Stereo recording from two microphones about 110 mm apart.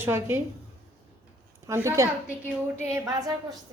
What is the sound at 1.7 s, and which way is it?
A woman's voice, 25° right (ahead or behind).